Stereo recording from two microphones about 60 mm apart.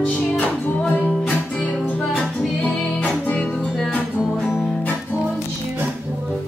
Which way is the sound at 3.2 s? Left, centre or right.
Left.